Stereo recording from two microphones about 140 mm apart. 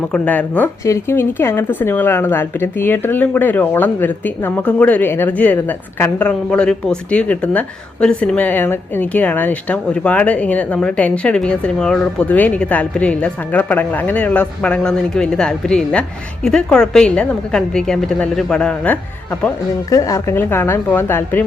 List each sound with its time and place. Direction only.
0.1 s a woman's voice: 10° left (ahead or behind)
19.9 s a woman's voice: 20° left (ahead or behind)